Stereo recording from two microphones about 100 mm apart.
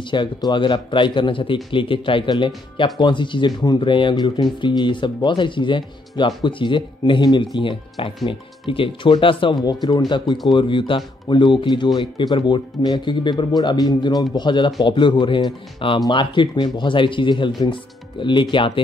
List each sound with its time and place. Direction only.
0.1 s speech: 50° left (ahead or behind)
9.6 s speech: 40° left (ahead or behind)